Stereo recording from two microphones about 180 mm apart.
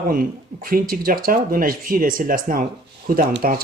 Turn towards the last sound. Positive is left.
turn(degrees=-55)  # may be behind; listen again after turning